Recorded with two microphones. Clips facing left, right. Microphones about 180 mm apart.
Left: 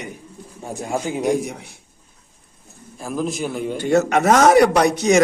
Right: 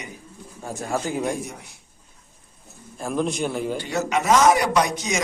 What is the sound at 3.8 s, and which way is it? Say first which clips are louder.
A man's voice: left 8 dB; 55° left (ahead or behind).